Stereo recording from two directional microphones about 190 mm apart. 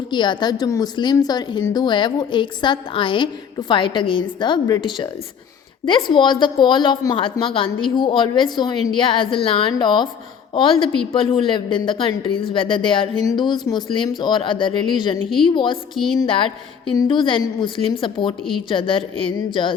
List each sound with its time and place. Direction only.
0.1 s speech: 25° left (ahead or behind)